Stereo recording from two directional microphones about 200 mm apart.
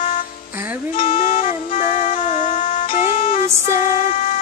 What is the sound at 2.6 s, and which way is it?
Music, 45° left (ahead or behind).